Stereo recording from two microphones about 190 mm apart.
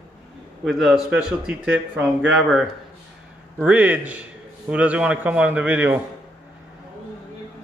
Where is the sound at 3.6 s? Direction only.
10° right (ahead or behind).